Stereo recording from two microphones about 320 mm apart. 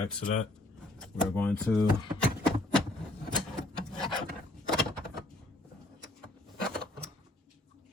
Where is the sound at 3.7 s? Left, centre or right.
Centre.